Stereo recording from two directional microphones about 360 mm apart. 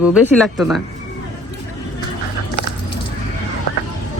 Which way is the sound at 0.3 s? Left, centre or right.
Centre.